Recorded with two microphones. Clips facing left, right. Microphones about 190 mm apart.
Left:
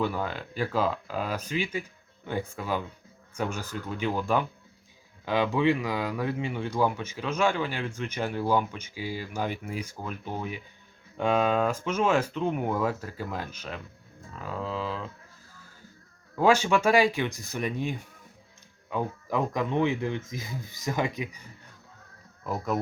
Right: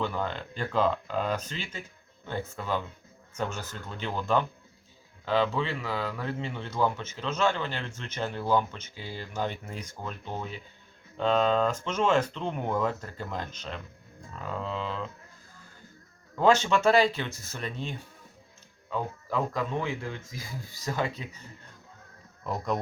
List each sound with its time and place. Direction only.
0.0 s speech: 10° left (ahead or behind)
16.3 s speech: 10° left (ahead or behind)
22.4 s speech: 5° left (ahead or behind)